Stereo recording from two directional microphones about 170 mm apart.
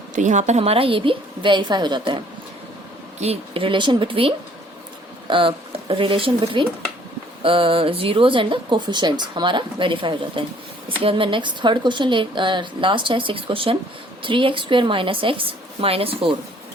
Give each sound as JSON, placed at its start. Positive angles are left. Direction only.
{"t": 0.2, "sound": "a woman's voice", "side_deg": -45}